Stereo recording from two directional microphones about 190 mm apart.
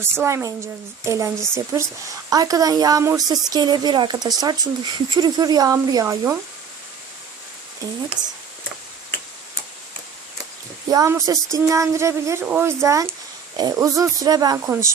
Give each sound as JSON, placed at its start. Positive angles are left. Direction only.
{"t": 0.0, "sound": "speech", "side_deg": -15}
{"t": 8.2, "sound": "speech", "side_deg": -40}
{"t": 10.8, "sound": "speech", "side_deg": -20}